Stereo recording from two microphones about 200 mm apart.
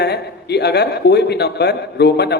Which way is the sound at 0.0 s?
55° left (ahead or behind).